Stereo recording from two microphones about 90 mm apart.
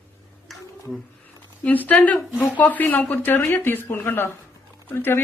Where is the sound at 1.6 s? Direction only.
20° left (ahead or behind).